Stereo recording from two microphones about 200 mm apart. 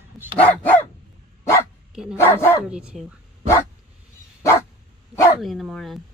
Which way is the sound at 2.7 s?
5° right (ahead or behind).